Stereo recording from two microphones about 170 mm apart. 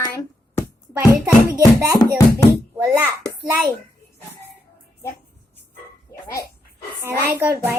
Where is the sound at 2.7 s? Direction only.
10° right (ahead or behind).